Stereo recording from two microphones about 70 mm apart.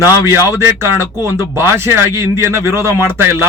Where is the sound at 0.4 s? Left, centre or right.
Right.